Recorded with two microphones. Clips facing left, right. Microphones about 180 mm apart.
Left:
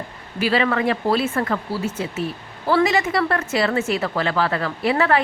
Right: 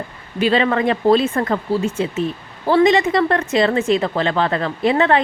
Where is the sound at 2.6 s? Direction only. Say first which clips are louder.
Right 5 dB; 30° right (ahead or behind).